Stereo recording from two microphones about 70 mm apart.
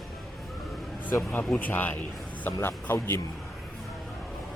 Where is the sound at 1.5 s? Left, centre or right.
Left.